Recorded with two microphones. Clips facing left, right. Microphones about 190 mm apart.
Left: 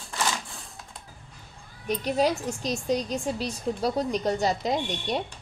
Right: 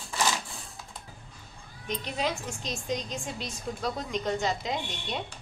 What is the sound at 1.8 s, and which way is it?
A woman's voice, 40° left (ahead or behind).